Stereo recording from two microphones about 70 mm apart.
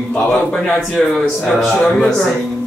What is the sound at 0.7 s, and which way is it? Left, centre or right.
Speech, centre.